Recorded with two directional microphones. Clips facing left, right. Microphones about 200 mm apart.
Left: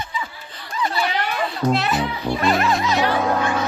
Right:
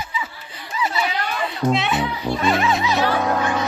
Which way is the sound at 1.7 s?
Centre (ahead or behind).